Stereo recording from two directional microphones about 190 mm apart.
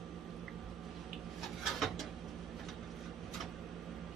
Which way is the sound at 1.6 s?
Centre (ahead or behind).